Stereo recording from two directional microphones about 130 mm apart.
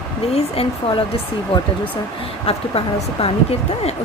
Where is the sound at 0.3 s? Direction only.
50° left (ahead or behind).